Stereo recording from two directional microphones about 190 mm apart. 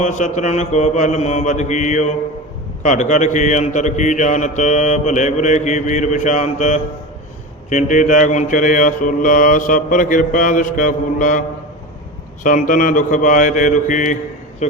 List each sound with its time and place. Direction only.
0.0 s speech: 40° left (ahead or behind)
7.7 s mantra: 40° left (ahead or behind)
14.6 s speech: 35° left (ahead or behind)